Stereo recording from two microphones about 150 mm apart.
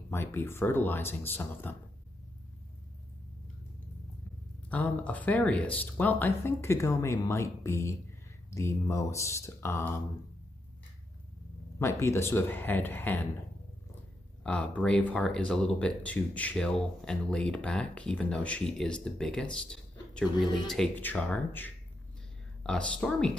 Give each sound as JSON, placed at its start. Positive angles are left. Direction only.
{"t": 0.1, "sound": "speech", "side_deg": 15}
{"t": 4.6, "sound": "speech", "side_deg": 10}
{"t": 11.8, "sound": "speech", "side_deg": 20}
{"t": 14.4, "sound": "speech", "side_deg": 10}
{"t": 19.5, "sound": "a sound", "side_deg": 5}
{"t": 20.3, "sound": "speech", "side_deg": 30}
{"t": 20.6, "sound": "speech", "side_deg": 5}